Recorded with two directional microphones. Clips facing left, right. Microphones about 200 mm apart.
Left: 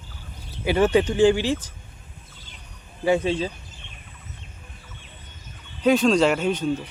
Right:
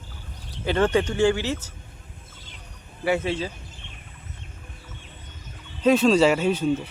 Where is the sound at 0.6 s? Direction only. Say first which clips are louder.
Left 2 dB; 10° left (ahead or behind).